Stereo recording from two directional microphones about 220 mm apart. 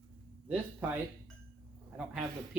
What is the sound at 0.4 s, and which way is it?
Speech, 5° right (ahead or behind).